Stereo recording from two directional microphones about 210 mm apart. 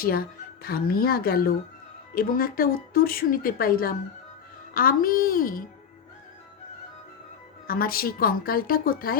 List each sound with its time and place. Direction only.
0.0 s speech: 45° left (ahead or behind)
7.7 s speech: 45° left (ahead or behind)